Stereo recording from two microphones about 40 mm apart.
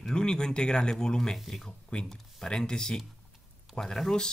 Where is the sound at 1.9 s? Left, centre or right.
Centre.